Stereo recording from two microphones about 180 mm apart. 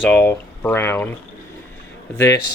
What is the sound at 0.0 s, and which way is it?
Speech, 10° left (ahead or behind).